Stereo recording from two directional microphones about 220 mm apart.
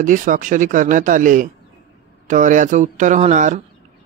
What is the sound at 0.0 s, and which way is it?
Speech, 35° right (ahead or behind).